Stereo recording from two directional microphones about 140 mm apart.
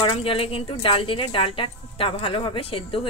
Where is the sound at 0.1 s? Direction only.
40° left (ahead or behind).